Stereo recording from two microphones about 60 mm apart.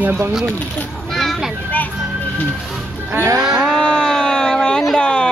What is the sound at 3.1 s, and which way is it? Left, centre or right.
Music, right.